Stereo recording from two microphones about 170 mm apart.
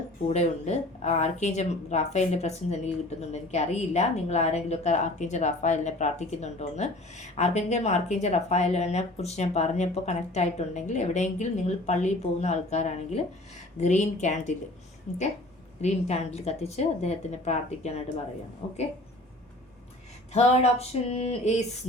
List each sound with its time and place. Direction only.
0.3 s speech: 40° left (ahead or behind)
15.8 s speech: 40° left (ahead or behind)
20.3 s speech: 40° left (ahead or behind)